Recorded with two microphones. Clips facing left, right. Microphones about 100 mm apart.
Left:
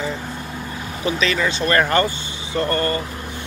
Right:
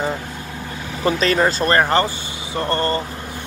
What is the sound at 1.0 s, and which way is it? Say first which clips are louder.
Speech: right 4 dB; 45° right (ahead or behind).